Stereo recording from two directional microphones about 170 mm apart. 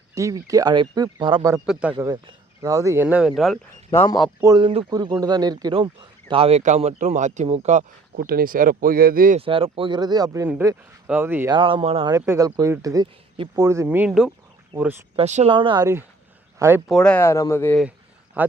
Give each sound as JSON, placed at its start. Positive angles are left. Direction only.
{"t": 0.1, "sound": "speech", "side_deg": -20}
{"t": 1.6, "sound": "speech", "side_deg": -5}
{"t": 2.0, "sound": "speech", "side_deg": -20}
{"t": 3.9, "sound": "a man's voice", "side_deg": 20}
{"t": 4.4, "sound": "speech", "side_deg": -20}
{"t": 8.1, "sound": "speech", "side_deg": -60}
{"t": 9.4, "sound": "speech", "side_deg": -35}
{"t": 11.5, "sound": "speech", "side_deg": -30}
{"t": 12.2, "sound": "speech", "side_deg": -15}
{"t": 15.1, "sound": "speech", "side_deg": -40}
{"t": 15.5, "sound": "speech", "side_deg": -30}
{"t": 16.6, "sound": "speech", "side_deg": -15}
{"t": 16.9, "sound": "speech", "side_deg": 5}
{"t": 18.4, "sound": "speech", "side_deg": -10}